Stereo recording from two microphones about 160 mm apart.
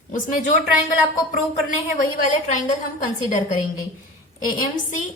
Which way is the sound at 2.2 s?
50° left (ahead or behind).